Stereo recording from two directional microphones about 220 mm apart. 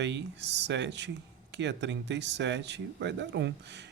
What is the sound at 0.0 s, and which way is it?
Speech, 50° right (ahead or behind).